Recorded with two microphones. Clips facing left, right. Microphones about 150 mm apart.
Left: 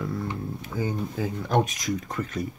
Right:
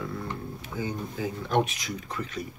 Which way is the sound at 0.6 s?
45° left (ahead or behind).